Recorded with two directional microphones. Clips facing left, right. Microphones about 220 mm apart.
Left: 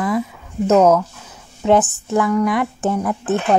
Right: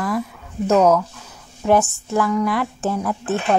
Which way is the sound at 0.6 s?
20° left (ahead or behind).